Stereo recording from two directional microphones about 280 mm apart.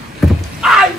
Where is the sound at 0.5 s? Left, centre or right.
Centre.